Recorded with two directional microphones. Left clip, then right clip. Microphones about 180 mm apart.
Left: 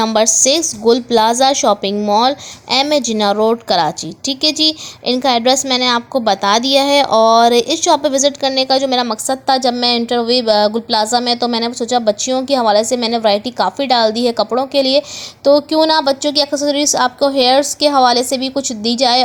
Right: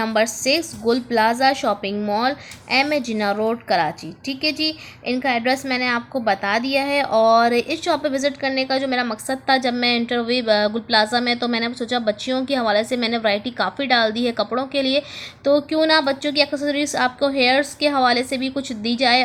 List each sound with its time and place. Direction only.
0.0 s a woman's voice: 35° left (ahead or behind)